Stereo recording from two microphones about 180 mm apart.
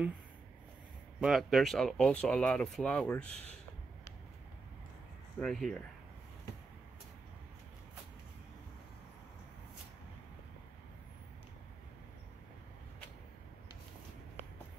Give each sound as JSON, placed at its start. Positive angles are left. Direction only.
{"t": 1.2, "sound": "speech", "side_deg": 0}
{"t": 5.4, "sound": "speech", "side_deg": 0}